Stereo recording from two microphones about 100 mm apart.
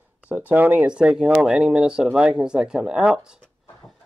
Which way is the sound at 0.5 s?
15° right (ahead or behind).